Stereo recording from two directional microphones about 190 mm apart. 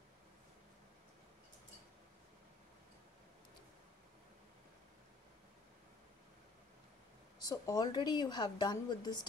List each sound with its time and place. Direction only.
7.4 s a woman's voice: 20° left (ahead or behind)